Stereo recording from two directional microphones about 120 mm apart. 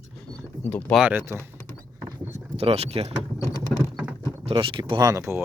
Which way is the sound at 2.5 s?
55° right (ahead or behind).